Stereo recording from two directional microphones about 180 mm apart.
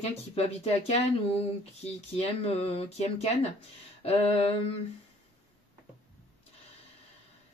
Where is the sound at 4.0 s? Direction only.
35° left (ahead or behind).